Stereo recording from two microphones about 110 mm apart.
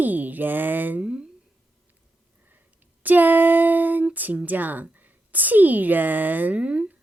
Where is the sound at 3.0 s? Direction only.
15° right (ahead or behind).